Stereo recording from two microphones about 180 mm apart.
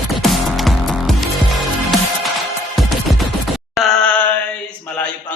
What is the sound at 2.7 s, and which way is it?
Music, centre (ahead or behind).